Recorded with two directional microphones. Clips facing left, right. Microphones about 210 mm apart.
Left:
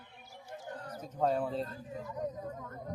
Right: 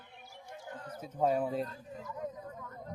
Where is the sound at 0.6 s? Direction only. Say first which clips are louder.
Left 1 dB; 45° left (ahead or behind).